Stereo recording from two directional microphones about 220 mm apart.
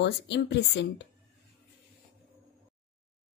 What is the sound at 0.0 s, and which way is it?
A woman's voice, 50° left (ahead or behind).